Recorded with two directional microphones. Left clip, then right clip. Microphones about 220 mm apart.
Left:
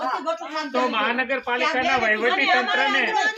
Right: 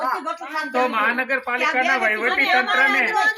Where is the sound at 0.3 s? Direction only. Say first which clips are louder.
Even; 15° right (ahead or behind); by 3.2 s centre (ahead or behind).